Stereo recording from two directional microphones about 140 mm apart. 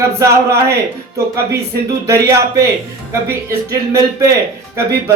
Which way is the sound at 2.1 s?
20° right (ahead or behind).